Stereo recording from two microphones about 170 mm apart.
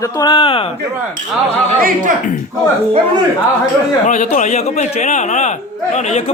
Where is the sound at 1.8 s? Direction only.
55° right (ahead or behind).